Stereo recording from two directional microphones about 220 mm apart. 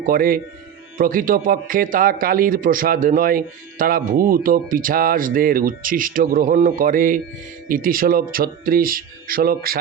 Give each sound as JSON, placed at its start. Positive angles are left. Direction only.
{"t": 0.0, "sound": "speech", "side_deg": -40}